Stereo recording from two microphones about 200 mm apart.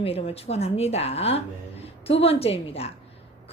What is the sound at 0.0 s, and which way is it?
A woman's voice, 30° left (ahead or behind).